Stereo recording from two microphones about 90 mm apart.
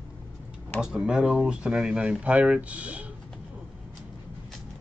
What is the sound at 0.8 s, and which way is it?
Speech, 10° right (ahead or behind).